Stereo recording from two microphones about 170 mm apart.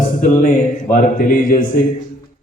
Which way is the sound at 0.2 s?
50° left (ahead or behind).